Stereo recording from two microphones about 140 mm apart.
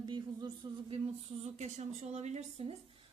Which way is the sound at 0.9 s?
45° right (ahead or behind).